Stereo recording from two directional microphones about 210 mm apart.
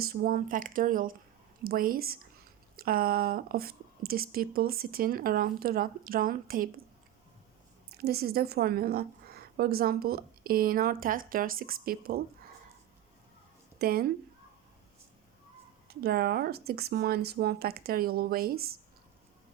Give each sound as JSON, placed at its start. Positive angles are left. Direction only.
{"t": 0.0, "sound": "a woman's voice", "side_deg": -45}
{"t": 7.9, "sound": "a woman's voice", "side_deg": -50}
{"t": 13.7, "sound": "speech", "side_deg": -45}
{"t": 15.9, "sound": "a woman's voice", "side_deg": -50}